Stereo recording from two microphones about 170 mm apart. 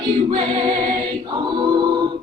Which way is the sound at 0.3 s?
30° right (ahead or behind).